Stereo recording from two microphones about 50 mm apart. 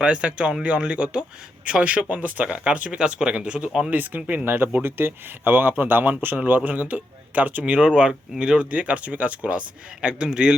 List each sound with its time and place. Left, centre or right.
0.0 s speech: right
2.9 s speech: centre
3.8 s speech: right; by 10.5 s centre